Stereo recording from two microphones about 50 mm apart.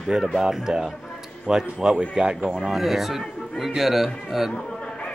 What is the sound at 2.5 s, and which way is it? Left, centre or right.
A man's voice, centre.